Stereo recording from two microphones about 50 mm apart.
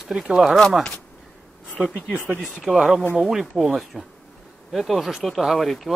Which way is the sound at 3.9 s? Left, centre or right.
Centre.